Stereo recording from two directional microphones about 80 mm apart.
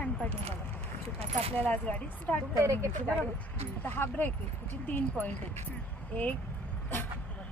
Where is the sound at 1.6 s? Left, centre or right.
Centre.